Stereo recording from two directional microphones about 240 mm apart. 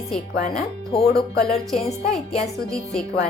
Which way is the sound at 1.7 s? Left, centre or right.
Centre.